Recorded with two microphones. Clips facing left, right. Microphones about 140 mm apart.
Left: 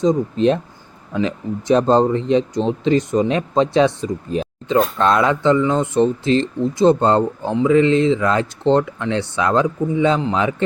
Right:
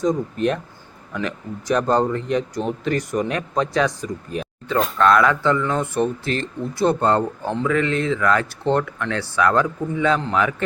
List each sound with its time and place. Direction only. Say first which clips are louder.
1.1 s speech: left 6 dB; 25° left (ahead or behind)